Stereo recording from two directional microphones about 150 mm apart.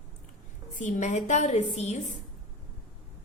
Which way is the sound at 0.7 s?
55° left (ahead or behind).